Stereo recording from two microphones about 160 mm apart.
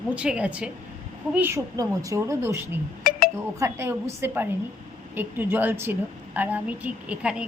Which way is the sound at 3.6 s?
15° right (ahead or behind).